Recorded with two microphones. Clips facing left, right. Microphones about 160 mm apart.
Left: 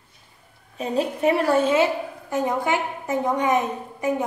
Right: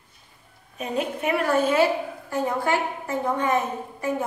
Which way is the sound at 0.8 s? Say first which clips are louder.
Left 4 dB; 30° left (ahead or behind).